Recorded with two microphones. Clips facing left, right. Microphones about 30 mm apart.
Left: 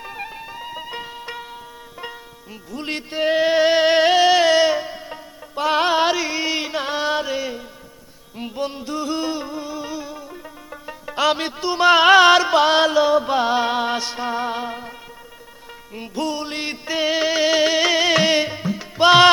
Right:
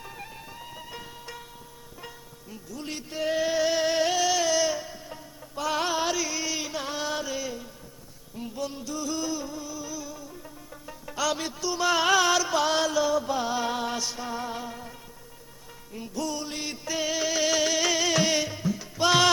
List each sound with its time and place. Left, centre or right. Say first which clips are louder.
0.0 s music: left 9 dB; left
2.7 s music: left 9 dB; left
16.0 s music: left 7 dB; left